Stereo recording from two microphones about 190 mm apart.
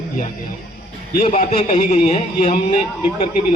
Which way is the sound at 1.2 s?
35° left (ahead or behind).